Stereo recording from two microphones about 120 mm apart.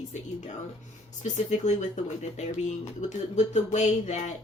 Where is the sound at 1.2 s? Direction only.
85° left.